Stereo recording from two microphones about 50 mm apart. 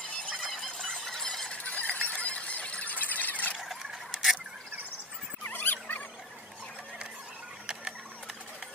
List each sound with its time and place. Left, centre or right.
0.4 s squeal: centre
1.5 s squeal: left
3.6 s a sound: centre
5.4 s squeal: left